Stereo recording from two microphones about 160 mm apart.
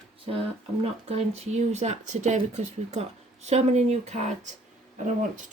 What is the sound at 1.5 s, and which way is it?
Speech, 45° right (ahead or behind).